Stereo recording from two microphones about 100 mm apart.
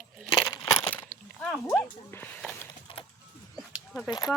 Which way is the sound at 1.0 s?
15° left (ahead or behind).